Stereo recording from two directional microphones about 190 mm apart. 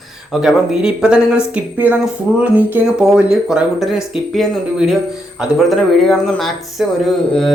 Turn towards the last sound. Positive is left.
turn(degrees=0)  # may be behind; listen again after turning